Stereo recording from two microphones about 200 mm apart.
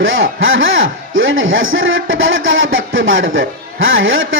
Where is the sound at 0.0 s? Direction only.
80° right.